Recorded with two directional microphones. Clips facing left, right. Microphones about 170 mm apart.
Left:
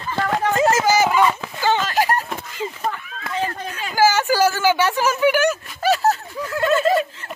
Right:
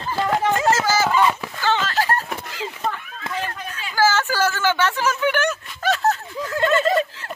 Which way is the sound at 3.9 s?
15° left (ahead or behind).